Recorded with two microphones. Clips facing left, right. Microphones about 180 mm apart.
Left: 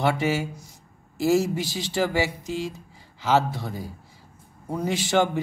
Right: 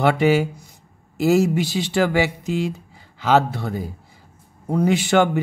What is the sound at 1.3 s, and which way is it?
Speech, 70° right (ahead or behind).